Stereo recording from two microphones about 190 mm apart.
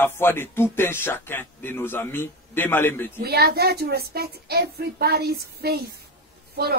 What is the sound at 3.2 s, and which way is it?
A woman's voice, 55° right (ahead or behind).